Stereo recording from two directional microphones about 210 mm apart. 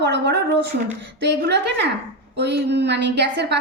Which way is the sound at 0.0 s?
55° right (ahead or behind).